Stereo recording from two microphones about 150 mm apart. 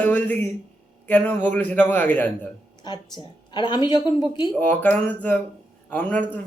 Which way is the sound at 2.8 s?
30° left (ahead or behind).